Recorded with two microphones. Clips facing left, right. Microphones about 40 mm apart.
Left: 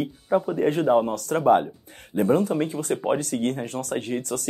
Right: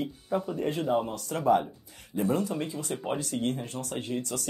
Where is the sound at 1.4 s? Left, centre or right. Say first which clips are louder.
Left 5 dB; left.